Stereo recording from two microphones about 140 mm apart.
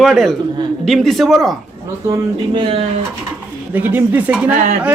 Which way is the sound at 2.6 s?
40° right (ahead or behind).